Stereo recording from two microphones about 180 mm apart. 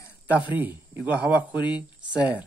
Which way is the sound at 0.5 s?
10° right (ahead or behind).